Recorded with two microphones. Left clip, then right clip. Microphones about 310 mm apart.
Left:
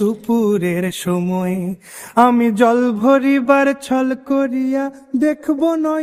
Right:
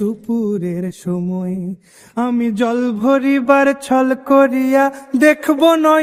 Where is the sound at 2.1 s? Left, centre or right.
Left; by 6.0 s right.